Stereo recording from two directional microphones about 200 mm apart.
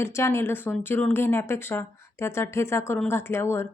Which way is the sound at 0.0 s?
15° left (ahead or behind).